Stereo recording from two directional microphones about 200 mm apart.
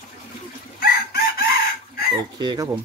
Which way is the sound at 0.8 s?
50° left (ahead or behind).